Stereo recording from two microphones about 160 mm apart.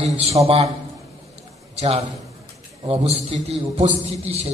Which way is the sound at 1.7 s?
40° right (ahead or behind).